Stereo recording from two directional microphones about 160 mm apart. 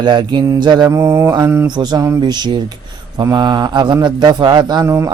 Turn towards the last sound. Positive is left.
turn(degrees=-20)  # may be behind; listen again after turning